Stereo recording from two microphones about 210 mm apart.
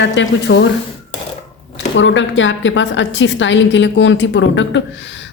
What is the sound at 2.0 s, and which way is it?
Speech, 60° left (ahead or behind).